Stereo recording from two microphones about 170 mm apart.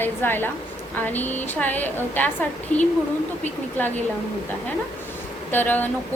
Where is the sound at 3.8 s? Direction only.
10° left (ahead or behind).